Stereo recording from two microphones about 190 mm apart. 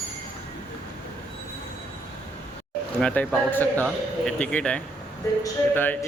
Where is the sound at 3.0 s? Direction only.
5° left (ahead or behind).